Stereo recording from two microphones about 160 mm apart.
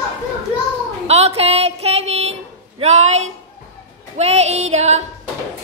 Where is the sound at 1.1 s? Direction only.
40° right (ahead or behind).